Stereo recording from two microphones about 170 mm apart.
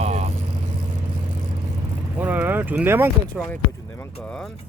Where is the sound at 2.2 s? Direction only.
10° right (ahead or behind).